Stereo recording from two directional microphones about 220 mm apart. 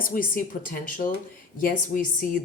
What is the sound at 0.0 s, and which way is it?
Speech, 40° left (ahead or behind).